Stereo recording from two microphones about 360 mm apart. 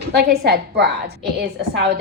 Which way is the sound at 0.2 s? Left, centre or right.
Right.